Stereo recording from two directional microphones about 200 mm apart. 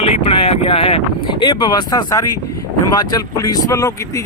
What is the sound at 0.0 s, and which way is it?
Speech, 30° left (ahead or behind).